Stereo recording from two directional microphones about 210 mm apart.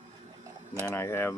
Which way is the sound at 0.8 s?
10° left (ahead or behind).